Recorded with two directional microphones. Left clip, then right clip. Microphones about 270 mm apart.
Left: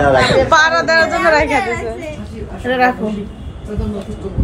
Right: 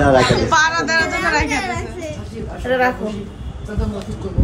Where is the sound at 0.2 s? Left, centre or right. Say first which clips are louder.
Left 4 dB; centre.